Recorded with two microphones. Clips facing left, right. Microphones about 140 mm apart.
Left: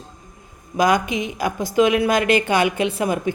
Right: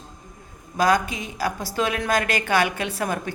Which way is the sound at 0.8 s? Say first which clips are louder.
Left 3 dB; 15° left (ahead or behind).